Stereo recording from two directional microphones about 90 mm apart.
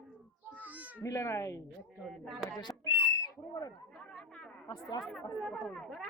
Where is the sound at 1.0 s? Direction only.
35° left (ahead or behind).